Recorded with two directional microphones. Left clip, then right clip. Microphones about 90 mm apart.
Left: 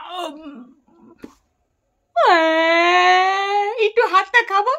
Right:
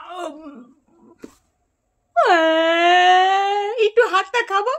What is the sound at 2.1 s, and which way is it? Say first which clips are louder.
Speech: left 1 dB; 35° left (ahead or behind).